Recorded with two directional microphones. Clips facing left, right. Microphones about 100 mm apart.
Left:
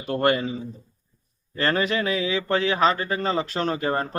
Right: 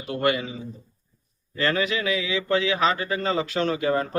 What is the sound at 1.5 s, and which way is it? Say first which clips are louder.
A man's voice: left 1 dB; 40° left (ahead or behind).